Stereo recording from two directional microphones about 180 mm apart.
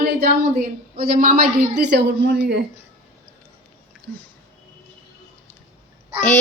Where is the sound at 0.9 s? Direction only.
55° right (ahead or behind).